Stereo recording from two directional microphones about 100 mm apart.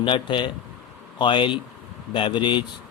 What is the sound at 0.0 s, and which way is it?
Speech, 55° left (ahead or behind).